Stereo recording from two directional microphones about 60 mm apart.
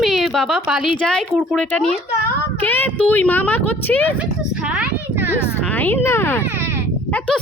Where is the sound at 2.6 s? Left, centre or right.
Left.